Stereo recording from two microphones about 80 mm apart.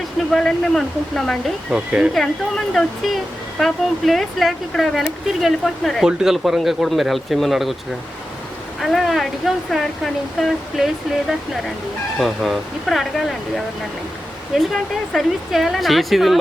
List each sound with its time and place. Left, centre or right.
0.3 s speech: centre
1.7 s speech: centre
3.6 s speech: centre
8.8 s speech: centre
14.5 s speech: centre